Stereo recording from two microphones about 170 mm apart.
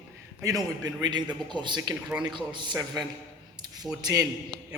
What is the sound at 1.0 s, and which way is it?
A man's voice, 25° right (ahead or behind).